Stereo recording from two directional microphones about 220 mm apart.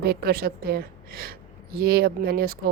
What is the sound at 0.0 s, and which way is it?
A woman's voice, 45° right (ahead or behind).